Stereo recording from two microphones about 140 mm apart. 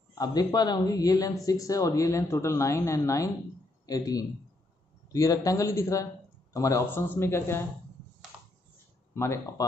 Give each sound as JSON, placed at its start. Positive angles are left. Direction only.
{"t": 0.1, "sound": "a man's voice", "side_deg": 25}
{"t": 9.1, "sound": "speech", "side_deg": 20}